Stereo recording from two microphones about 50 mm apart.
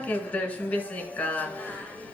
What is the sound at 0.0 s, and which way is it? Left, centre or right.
A woman's voice, left.